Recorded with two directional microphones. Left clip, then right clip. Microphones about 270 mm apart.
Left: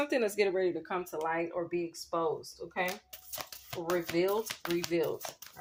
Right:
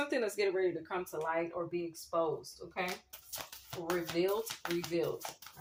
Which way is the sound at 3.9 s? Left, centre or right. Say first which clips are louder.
Left 3 dB; left.